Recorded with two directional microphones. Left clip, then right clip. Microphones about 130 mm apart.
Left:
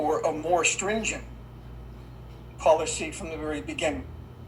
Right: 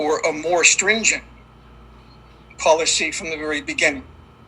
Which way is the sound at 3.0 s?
20° right (ahead or behind).